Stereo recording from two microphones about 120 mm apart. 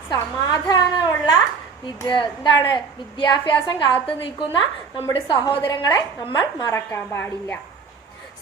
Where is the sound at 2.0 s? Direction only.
40° left (ahead or behind).